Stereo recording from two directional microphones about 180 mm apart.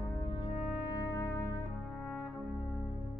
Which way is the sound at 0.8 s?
20° left (ahead or behind).